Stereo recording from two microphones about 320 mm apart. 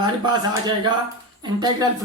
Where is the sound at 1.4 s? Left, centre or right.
Centre.